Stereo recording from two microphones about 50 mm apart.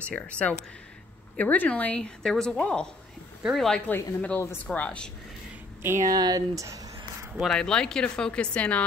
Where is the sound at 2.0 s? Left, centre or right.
Centre.